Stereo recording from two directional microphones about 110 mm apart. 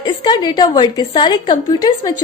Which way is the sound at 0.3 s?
40° left (ahead or behind).